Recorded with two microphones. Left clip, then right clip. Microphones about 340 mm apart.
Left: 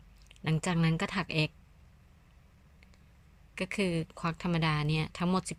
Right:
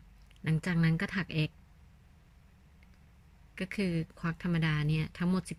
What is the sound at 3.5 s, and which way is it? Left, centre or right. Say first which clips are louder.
Speech: left 3 dB; centre.